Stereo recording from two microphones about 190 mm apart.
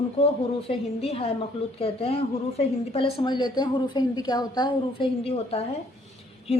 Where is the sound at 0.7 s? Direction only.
30° left (ahead or behind).